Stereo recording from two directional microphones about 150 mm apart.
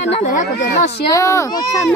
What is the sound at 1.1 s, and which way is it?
Speech, 20° left (ahead or behind).